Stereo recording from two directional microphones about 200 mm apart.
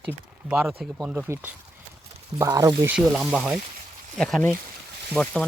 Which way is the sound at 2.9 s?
5° right (ahead or behind).